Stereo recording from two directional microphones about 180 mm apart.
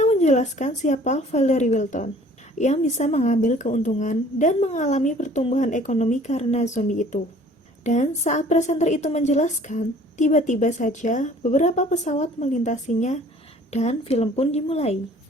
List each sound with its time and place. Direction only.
0.0 s a woman's voice: 40° left (ahead or behind)